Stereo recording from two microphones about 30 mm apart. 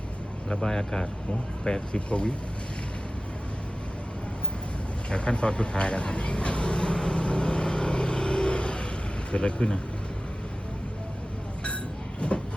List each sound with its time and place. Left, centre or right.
0.5 s speech: left
1.6 s speech: left
5.1 s speech: left
7.2 s vehicle: left
8.4 s vehicle: left
9.3 s speech: left
12.2 s speech: left